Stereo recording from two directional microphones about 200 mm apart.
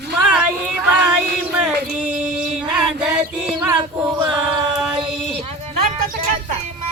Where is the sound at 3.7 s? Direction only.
15° right (ahead or behind).